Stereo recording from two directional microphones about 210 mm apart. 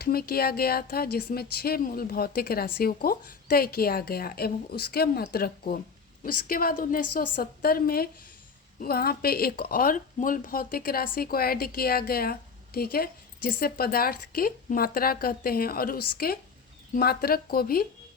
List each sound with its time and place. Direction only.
0.0 s speech: 45° left (ahead or behind)